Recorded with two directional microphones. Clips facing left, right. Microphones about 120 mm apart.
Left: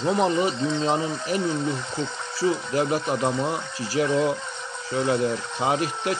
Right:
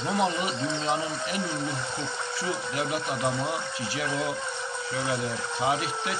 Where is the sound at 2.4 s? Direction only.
35° left (ahead or behind).